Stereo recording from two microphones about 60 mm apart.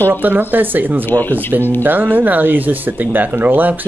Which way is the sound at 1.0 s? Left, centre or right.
Left.